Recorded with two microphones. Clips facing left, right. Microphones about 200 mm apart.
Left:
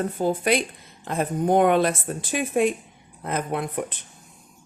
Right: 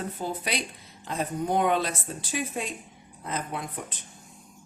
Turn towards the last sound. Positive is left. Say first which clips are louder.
# left 7 dB
turn(degrees=60)  # may be behind; listen again after turning